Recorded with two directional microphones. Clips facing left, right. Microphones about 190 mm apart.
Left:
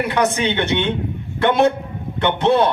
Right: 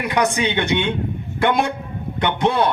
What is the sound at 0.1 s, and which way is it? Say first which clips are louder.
Speech: left 1 dB; 15° right (ahead or behind).